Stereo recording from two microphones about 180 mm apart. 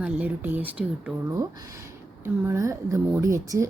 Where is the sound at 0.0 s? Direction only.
10° right (ahead or behind).